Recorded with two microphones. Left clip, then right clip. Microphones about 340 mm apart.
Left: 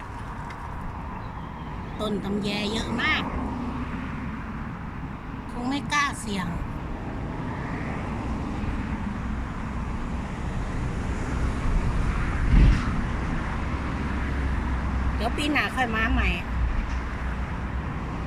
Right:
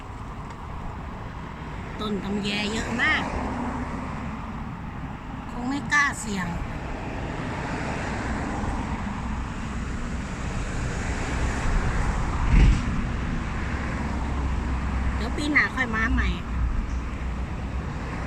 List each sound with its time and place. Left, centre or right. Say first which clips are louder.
2.0 s speech: left 1 dB; centre
5.6 s speech: right 3 dB; centre
7.7 s vehicle: right 3 dB; right
15.2 s speech: right 2 dB; centre